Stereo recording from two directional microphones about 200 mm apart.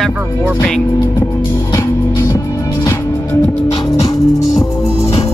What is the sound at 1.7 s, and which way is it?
Music, 20° left (ahead or behind).